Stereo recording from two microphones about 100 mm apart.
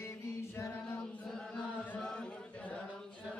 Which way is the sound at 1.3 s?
10° left (ahead or behind).